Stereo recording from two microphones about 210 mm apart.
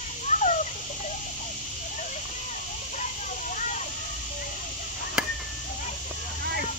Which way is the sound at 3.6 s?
35° left (ahead or behind).